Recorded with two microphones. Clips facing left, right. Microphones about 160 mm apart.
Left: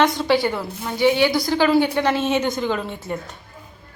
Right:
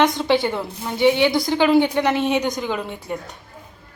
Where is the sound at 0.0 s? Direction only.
20° right (ahead or behind).